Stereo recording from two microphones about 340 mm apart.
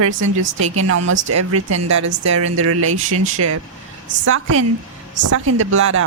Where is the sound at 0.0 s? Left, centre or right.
Right.